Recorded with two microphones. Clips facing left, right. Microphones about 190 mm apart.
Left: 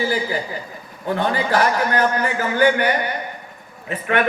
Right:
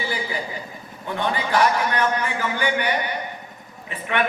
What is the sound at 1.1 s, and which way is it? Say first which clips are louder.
A man's voice: left 3 dB; 40° left (ahead or behind).